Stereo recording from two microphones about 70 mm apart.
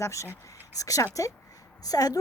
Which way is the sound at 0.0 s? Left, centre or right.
Left.